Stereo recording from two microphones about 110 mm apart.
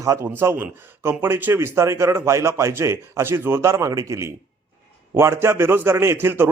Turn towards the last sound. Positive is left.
turn(degrees=-20)  # may be behind; listen again after turning